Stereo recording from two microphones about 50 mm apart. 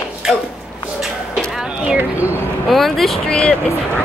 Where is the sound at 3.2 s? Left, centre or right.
Centre.